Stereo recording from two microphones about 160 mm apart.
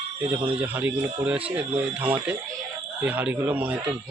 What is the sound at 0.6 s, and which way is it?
Speech, 10° right (ahead or behind).